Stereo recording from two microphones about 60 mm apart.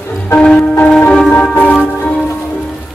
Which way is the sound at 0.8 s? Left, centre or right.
Centre.